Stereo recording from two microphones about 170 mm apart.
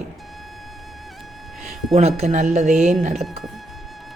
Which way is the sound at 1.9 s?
40° right (ahead or behind).